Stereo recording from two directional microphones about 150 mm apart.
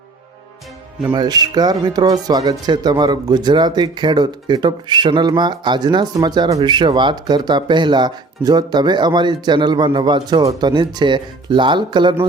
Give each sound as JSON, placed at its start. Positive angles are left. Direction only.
{"t": 1.0, "sound": "speech", "side_deg": -25}